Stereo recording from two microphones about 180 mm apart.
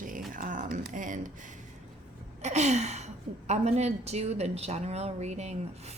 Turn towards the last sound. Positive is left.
turn(degrees=-40)  # may be behind; listen again after turning